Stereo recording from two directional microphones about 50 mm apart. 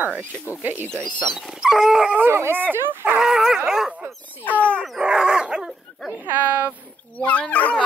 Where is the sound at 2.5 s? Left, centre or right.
Right.